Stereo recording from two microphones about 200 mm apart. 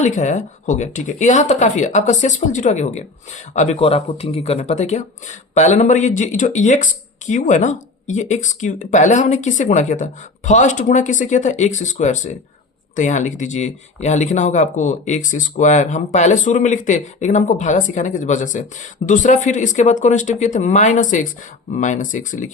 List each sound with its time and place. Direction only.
0.0 s speech: 35° left (ahead or behind)